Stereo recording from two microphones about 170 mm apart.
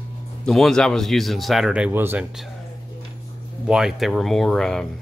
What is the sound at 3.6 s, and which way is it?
A man's voice, 5° right (ahead or behind).